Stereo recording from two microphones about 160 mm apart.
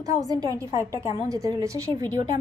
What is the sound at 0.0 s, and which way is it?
A woman's voice, 20° right (ahead or behind).